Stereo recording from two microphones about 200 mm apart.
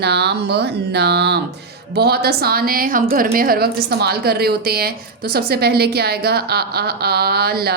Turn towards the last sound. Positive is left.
turn(degrees=-50)  # may be behind; listen again after turning